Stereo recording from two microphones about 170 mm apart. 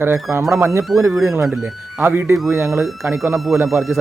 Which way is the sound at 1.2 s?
15° right (ahead or behind).